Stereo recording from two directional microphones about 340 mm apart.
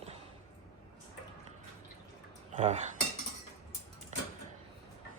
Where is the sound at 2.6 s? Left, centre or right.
Centre.